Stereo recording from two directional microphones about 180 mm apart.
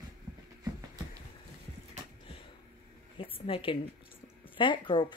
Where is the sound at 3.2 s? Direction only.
30° left (ahead or behind).